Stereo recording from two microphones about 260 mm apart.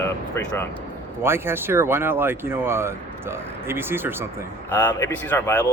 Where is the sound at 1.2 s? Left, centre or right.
Centre.